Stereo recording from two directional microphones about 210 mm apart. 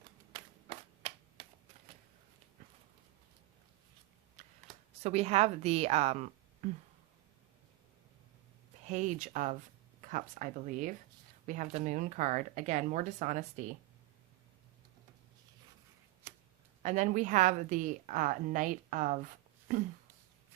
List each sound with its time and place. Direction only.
0.3 s clapping: 25° right (ahead or behind)
4.4 s a sound: 35° right (ahead or behind)
5.0 s a woman's voice: 30° right (ahead or behind)
8.9 s a woman's voice: 35° right (ahead or behind)
16.2 s a sound: 10° right (ahead or behind)
16.8 s a woman's voice: 35° right (ahead or behind)